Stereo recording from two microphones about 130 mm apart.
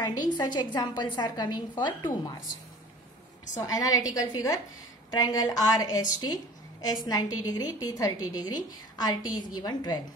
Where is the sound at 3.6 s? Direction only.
30° left (ahead or behind).